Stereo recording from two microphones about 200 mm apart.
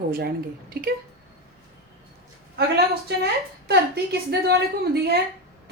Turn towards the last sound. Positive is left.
turn(degrees=-55)  # may be behind; listen again after turning